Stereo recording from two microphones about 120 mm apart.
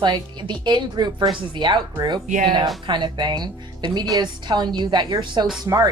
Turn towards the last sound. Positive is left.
turn(degrees=-30)  # may be behind; listen again after turning